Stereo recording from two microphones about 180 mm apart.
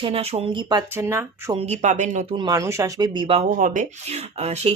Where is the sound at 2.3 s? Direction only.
20° right (ahead or behind).